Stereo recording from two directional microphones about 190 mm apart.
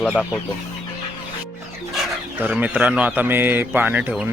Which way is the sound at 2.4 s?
5° right (ahead or behind).